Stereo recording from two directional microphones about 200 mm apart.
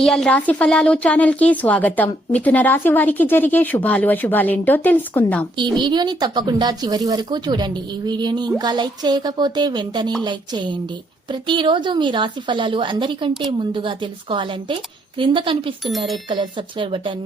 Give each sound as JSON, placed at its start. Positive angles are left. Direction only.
{"t": 0.0, "sound": "a woman's voice", "side_deg": 5}
{"t": 5.5, "sound": "a woman's voice", "side_deg": -20}